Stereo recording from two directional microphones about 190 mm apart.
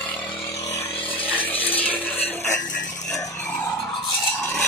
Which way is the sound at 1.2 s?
10° left (ahead or behind).